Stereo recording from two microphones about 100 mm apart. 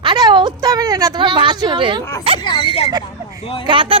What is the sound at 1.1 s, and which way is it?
Speech, 50° right (ahead or behind).